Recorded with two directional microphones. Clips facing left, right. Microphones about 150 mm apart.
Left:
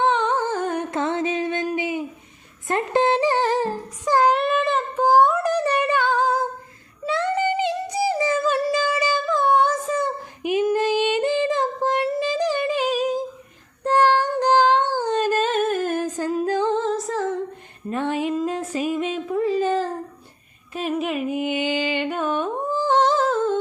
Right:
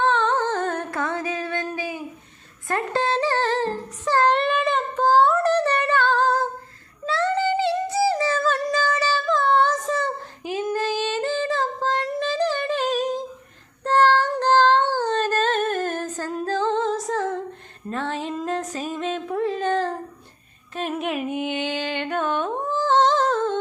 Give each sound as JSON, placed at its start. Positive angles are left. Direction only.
{"t": 0.0, "sound": "humming", "side_deg": 15}
{"t": 5.0, "sound": "a sound", "side_deg": 15}
{"t": 7.0, "sound": "music", "side_deg": 15}
{"t": 16.7, "sound": "music", "side_deg": 0}
{"t": 17.8, "sound": "music", "side_deg": 15}
{"t": 18.3, "sound": "a sound", "side_deg": 5}
{"t": 20.7, "sound": "music", "side_deg": 0}